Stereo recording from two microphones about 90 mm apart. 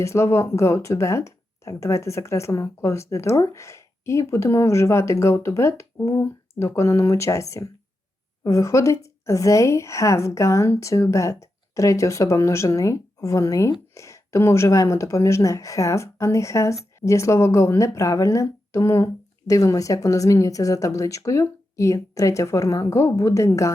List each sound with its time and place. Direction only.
0.0 s speech: 30° left (ahead or behind)